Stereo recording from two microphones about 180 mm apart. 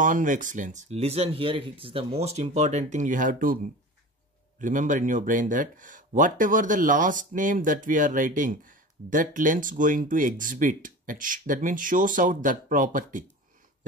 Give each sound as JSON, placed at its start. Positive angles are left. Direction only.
{"t": 0.0, "sound": "speech", "side_deg": -45}
{"t": 4.6, "sound": "speech", "side_deg": -45}